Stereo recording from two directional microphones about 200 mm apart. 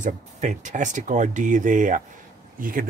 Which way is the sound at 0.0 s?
40° right (ahead or behind).